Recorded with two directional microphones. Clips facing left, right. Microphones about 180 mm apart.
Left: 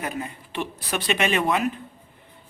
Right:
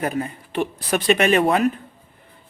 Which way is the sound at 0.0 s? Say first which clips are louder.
Right 6 dB; 45° right (ahead or behind).